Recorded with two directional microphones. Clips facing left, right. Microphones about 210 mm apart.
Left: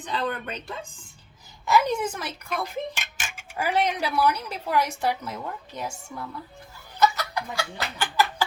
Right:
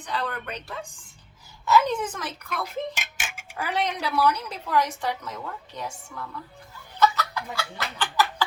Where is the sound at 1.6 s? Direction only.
10° left (ahead or behind).